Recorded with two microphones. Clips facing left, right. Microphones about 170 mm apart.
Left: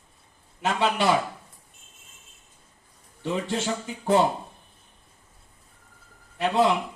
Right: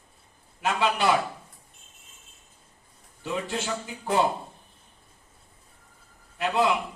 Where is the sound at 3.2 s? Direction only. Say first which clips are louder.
Left 3 dB; 30° left (ahead or behind).